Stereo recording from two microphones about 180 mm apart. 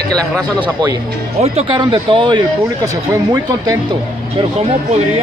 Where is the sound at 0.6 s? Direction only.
20° right (ahead or behind).